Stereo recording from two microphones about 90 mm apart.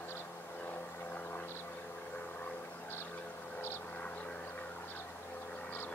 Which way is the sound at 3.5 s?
20° left (ahead or behind).